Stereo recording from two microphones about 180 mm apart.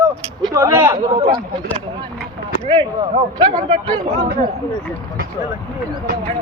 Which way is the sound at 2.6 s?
25° right (ahead or behind).